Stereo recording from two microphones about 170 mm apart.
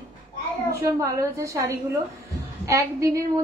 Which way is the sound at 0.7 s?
20° right (ahead or behind).